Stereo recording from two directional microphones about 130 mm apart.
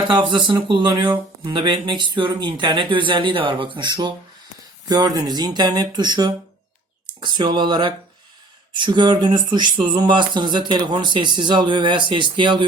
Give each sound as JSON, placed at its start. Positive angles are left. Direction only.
{"t": 0.1, "sound": "speech", "side_deg": -35}